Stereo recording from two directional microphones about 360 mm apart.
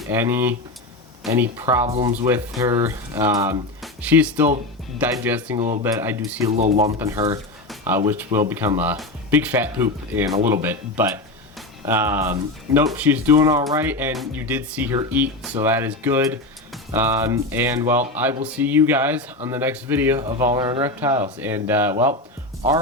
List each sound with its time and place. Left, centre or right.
0.0 s speech: centre
5.5 s speech: centre
5.8 s speech: centre
6.5 s speech: centre